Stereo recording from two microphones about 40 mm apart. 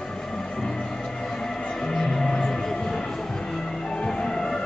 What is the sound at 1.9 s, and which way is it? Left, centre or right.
Music, centre.